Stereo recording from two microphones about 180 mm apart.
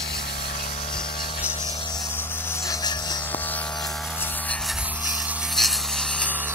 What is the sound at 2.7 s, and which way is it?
Toothbrush, 20° left (ahead or behind).